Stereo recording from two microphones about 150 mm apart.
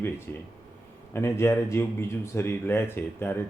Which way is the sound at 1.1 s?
15° left (ahead or behind).